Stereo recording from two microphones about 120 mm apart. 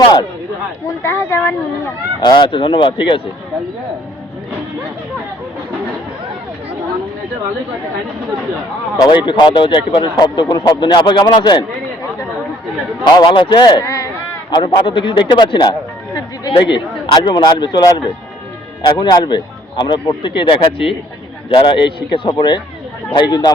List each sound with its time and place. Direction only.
0.9 s speech: 25° left (ahead or behind)
2.2 s speech: 40° left (ahead or behind)
9.0 s speech: 40° left (ahead or behind)
13.1 s speech: 40° left (ahead or behind)
13.8 s a sound: 25° left (ahead or behind)
14.5 s a man's voice: 45° left (ahead or behind)